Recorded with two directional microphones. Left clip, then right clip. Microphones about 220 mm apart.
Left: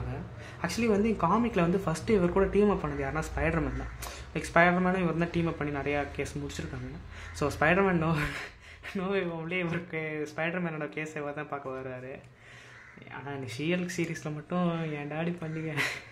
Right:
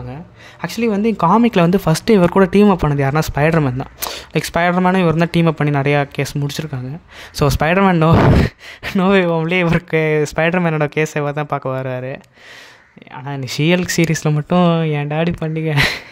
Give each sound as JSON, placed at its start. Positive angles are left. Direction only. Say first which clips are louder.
{"t": 0.6, "sound": "speech", "louder": "right 9 dB", "side_deg": -40}